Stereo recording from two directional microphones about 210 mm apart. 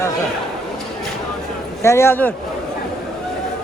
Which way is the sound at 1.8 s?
10° left (ahead or behind).